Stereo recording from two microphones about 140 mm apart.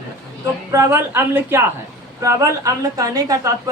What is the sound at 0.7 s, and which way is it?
A woman's voice, 15° right (ahead or behind).